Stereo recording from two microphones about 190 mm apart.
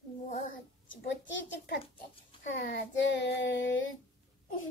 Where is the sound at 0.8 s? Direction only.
75° left (ahead or behind).